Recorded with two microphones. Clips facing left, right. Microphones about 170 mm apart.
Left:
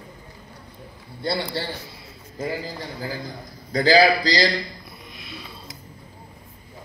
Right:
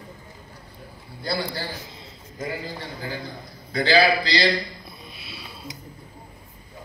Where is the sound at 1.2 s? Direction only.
25° left (ahead or behind).